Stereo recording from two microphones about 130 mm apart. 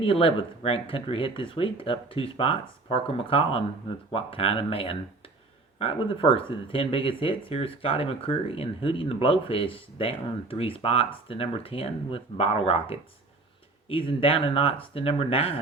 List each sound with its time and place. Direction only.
0.0 s speech: 45° left (ahead or behind)